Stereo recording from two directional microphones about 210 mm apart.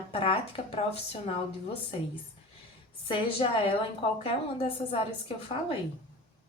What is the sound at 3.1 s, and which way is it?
A woman's voice, 25° left (ahead or behind).